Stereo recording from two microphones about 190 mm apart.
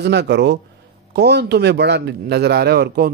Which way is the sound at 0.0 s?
65° right (ahead or behind).